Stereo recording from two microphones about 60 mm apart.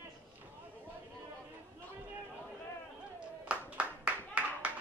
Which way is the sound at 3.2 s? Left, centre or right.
Right.